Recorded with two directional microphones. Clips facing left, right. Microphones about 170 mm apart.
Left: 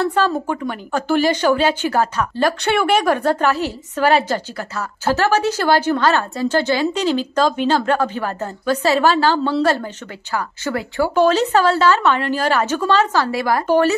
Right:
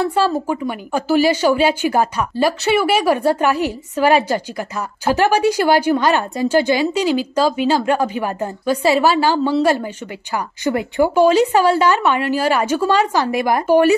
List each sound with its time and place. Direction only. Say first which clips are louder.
0.0 s a woman's voice: right 1 dB; 10° right (ahead or behind)